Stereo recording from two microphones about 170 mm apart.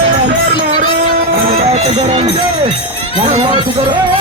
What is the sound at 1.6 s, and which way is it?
Speech, 35° right (ahead or behind).